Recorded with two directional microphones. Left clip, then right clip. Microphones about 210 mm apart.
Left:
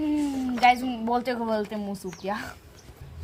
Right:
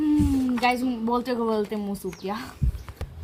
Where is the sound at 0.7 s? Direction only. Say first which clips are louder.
Left 2 dB; 30° left (ahead or behind).